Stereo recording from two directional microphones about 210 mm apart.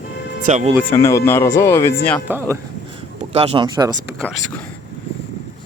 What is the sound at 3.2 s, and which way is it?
Speech, 30° right (ahead or behind).